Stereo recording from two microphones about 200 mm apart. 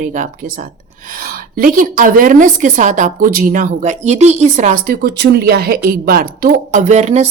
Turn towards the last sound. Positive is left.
turn(degrees=-35)  # may be behind; listen again after turning